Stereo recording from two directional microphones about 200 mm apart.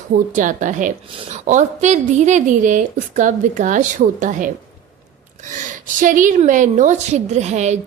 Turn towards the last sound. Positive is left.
turn(degrees=-35)  # may be behind; listen again after turning